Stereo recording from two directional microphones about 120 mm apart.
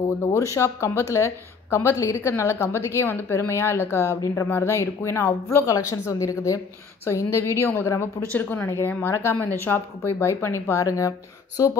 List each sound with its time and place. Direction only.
0.2 s a woman's voice: 25° left (ahead or behind)